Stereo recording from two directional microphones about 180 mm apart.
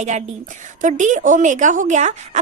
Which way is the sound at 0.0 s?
40° right (ahead or behind).